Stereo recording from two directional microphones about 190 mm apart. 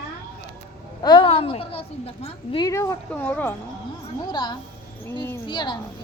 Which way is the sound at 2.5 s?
20° left (ahead or behind).